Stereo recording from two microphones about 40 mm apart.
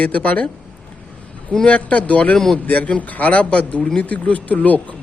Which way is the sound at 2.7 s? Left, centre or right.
Left.